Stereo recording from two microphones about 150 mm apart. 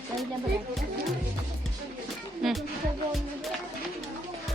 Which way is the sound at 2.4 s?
Centre (ahead or behind).